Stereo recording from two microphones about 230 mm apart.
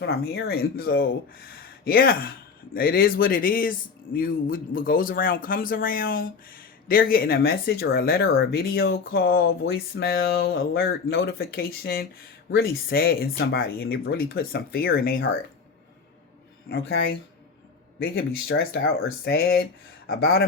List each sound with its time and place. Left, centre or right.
0.0 s speech: left
16.6 s speech: left